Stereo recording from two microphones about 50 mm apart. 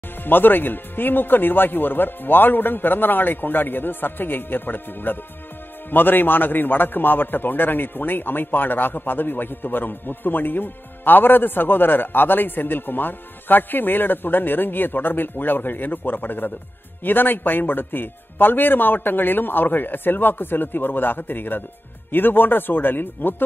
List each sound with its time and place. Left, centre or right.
0.2 s a man's voice: left